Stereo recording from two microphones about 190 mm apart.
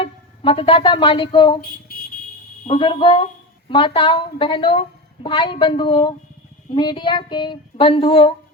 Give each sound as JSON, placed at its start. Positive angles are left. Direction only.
{"t": 0.0, "sound": "speech", "side_deg": 30}
{"t": 1.9, "sound": "vehicle", "side_deg": 55}
{"t": 2.6, "sound": "a woman's voice", "side_deg": 25}